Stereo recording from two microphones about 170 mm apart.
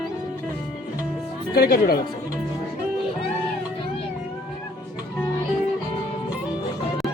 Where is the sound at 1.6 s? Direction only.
65° left (ahead or behind).